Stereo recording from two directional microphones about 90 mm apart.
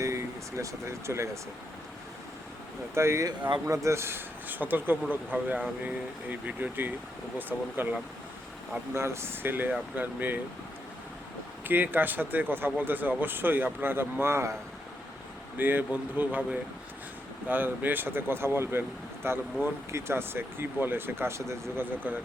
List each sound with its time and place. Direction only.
0.0 s speech: 30° right (ahead or behind)
2.9 s speech: 30° right (ahead or behind)
11.7 s speech: 20° right (ahead or behind)
15.5 s speech: 20° right (ahead or behind)